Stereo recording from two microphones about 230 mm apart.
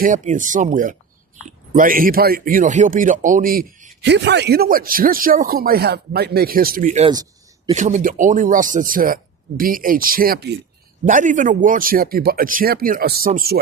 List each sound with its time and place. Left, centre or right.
0.0 s speech: right
4.0 s speech: right